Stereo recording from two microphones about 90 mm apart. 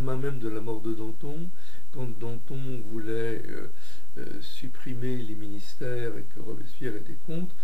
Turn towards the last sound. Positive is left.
turn(degrees=15)  # may be behind; listen again after turning